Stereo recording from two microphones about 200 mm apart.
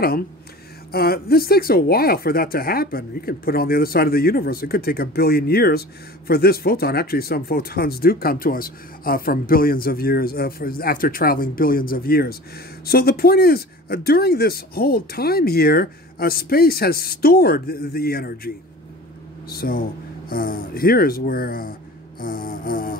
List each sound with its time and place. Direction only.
0.9 s speech: 50° left (ahead or behind)
19.5 s speech: 50° left (ahead or behind)